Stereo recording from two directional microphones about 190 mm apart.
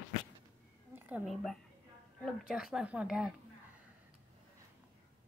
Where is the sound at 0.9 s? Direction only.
10° right (ahead or behind).